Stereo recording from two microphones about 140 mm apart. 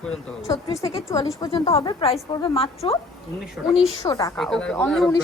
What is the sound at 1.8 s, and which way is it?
A woman's voice, 40° left (ahead or behind).